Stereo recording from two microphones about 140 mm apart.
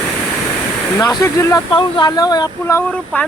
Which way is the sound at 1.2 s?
20° left (ahead or behind).